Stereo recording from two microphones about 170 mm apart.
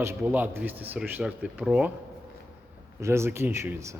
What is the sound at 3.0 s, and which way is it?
A man's voice, 15° right (ahead or behind).